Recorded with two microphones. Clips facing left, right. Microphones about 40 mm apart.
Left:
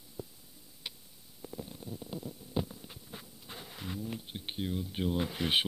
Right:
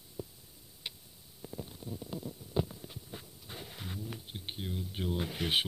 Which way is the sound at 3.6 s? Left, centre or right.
Centre.